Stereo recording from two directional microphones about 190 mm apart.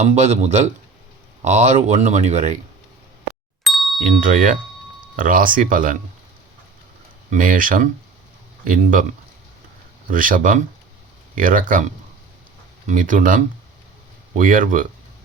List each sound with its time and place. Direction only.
0.0 s speech: 35° right (ahead or behind)
3.6 s ding: centre (ahead or behind)
4.0 s speech: 45° right (ahead or behind)
7.3 s speech: 45° right (ahead or behind)
10.1 s speech: 45° right (ahead or behind)
12.9 s speech: 45° right (ahead or behind)